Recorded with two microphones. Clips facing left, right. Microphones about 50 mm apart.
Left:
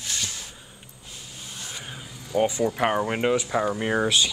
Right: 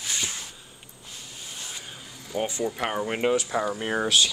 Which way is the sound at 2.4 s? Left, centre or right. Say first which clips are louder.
Left 5 dB; left.